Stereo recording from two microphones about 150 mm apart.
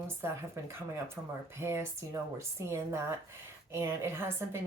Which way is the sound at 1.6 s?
15° right (ahead or behind).